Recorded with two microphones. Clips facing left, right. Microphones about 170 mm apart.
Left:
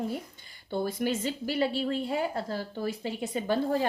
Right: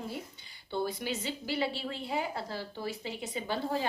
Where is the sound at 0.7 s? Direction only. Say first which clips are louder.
Left 4 dB; 50° left (ahead or behind).